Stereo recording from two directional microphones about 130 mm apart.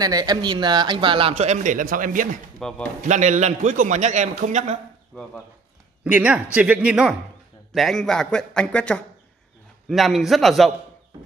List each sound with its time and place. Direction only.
0.0 s speech: 30° right (ahead or behind); by 2.2 s 90° right
2.6 s speech: 5° left (ahead or behind)
3.0 s a man's voice: 70° right (ahead or behind)
6.0 s a man's voice: 10° right (ahead or behind)
11.1 s a sound: 30° right (ahead or behind)